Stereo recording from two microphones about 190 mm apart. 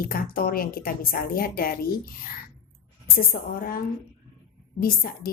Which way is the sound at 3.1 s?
50° left (ahead or behind).